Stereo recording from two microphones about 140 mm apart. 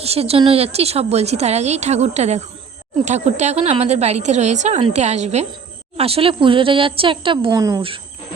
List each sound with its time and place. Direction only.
0.0 s a woman's voice: 45° right (ahead or behind); by 7.8 s 25° right (ahead or behind)